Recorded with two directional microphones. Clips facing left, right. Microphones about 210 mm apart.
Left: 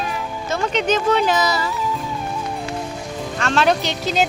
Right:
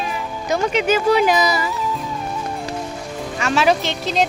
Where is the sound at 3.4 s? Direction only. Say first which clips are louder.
Right 1 dB; 5° right (ahead or behind).